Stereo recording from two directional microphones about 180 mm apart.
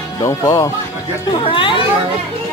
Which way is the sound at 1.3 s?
25° left (ahead or behind).